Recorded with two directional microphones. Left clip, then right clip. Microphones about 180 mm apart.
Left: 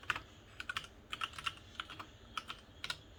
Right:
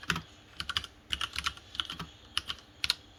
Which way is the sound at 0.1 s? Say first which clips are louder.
Right 5 dB; 15° right (ahead or behind).